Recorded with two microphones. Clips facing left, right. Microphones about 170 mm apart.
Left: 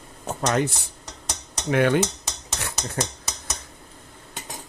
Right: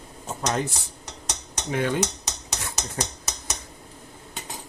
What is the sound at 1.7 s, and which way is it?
Speech, 70° left (ahead or behind).